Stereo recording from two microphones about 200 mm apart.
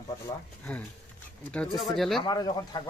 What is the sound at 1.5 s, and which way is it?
Speech, 5° left (ahead or behind).